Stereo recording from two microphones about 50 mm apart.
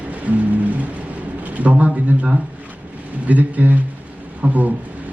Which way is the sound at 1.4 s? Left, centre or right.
Right.